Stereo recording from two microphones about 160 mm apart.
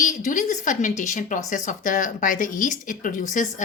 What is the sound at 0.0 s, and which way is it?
Speech, 50° left (ahead or behind).